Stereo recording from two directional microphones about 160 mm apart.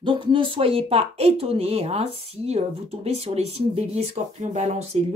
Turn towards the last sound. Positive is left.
turn(degrees=-45)  # may be behind; listen again after turning